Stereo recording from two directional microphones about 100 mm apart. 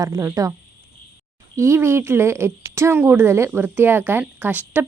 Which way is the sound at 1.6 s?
25° right (ahead or behind).